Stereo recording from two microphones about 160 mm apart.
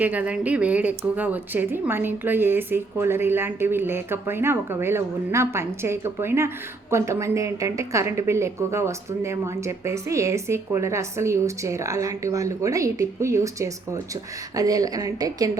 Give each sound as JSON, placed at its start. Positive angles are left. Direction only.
{"t": 0.0, "sound": "speech", "side_deg": -10}